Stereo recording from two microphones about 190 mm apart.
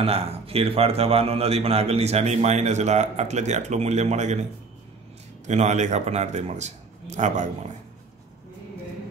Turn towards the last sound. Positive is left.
turn(degrees=-40)  # may be behind; listen again after turning